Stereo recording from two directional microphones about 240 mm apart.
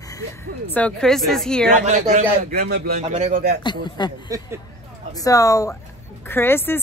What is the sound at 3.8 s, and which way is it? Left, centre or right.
Speech, centre.